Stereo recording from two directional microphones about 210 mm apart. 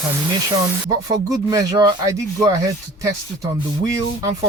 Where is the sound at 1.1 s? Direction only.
15° right (ahead or behind).